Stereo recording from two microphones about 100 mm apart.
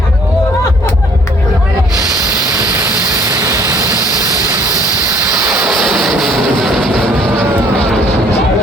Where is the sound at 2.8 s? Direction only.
25° right (ahead or behind).